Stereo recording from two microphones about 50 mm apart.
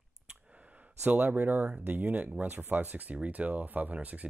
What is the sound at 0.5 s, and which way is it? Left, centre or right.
Speech, right.